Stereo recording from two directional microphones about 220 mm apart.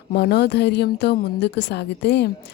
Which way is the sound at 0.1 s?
45° left (ahead or behind).